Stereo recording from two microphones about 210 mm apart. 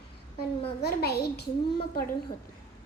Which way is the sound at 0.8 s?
50° left (ahead or behind).